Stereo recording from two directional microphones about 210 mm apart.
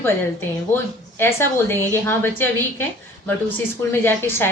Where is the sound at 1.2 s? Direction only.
10° left (ahead or behind).